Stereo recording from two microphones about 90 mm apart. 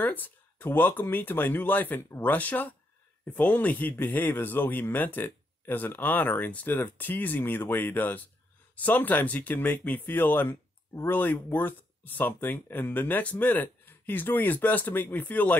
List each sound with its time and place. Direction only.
0.0 s speech: 20° left (ahead or behind)